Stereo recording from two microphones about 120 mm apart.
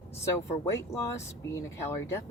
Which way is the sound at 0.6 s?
25° left (ahead or behind).